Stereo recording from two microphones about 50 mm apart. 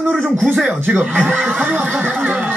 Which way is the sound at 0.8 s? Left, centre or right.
Right.